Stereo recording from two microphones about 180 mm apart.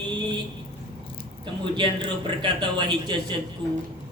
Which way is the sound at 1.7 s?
25° right (ahead or behind).